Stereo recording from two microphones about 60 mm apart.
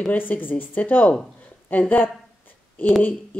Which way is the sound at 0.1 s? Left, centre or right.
Left.